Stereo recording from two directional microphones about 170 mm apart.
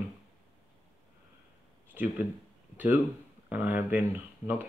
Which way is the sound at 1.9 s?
10° right (ahead or behind).